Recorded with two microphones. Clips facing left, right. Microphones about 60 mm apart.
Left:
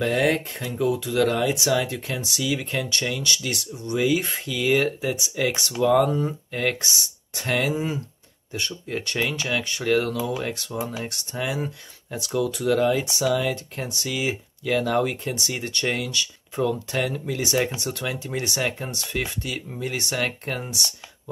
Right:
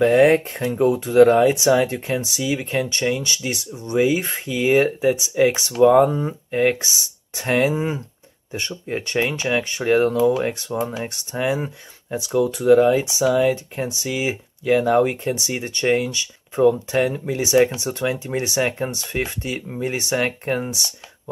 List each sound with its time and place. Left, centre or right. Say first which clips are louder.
0.0 s speech: right 8 dB; right